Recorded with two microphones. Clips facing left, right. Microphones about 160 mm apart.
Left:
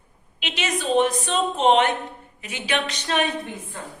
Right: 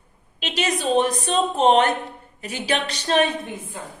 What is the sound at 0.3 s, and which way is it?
A woman's voice, 35° right (ahead or behind).